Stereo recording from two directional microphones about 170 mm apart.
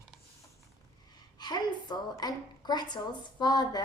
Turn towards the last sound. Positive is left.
turn(degrees=25)  # may be behind; listen again after turning